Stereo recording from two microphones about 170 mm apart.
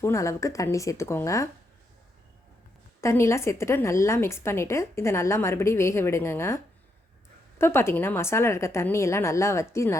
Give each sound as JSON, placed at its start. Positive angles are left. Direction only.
{"t": 0.0, "sound": "a woman's voice", "side_deg": 15}
{"t": 3.0, "sound": "a woman's voice", "side_deg": 15}
{"t": 7.6, "sound": "a woman's voice", "side_deg": 15}